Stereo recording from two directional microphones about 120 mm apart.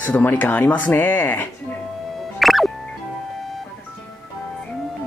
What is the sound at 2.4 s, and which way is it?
Music, centre (ahead or behind).